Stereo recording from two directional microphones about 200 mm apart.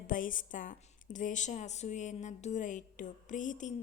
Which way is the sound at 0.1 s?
40° left (ahead or behind).